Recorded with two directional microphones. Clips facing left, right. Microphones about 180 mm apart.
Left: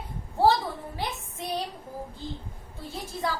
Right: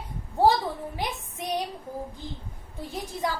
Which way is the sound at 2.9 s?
15° right (ahead or behind).